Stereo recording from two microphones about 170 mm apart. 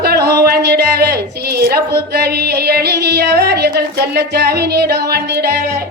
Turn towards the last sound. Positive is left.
turn(degrees=-70)  # may be behind; listen again after turning